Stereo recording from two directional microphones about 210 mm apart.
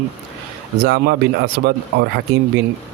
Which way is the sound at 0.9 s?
50° right (ahead or behind).